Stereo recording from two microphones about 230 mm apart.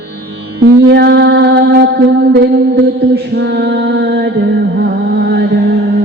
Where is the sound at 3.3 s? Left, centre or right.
Right.